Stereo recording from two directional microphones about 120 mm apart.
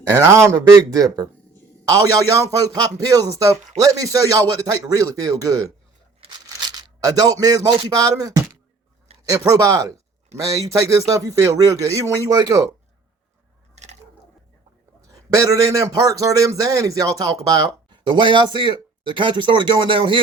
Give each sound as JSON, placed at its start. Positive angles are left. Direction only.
{"t": 0.1, "sound": "a man's voice", "side_deg": -25}
{"t": 6.1, "sound": "a sound", "side_deg": -50}
{"t": 6.7, "sound": "speech", "side_deg": -35}
{"t": 9.1, "sound": "a sound", "side_deg": -55}
{"t": 9.5, "sound": "a man's voice", "side_deg": -30}
{"t": 13.7, "sound": "biting", "side_deg": -70}
{"t": 15.1, "sound": "a man's voice", "side_deg": -30}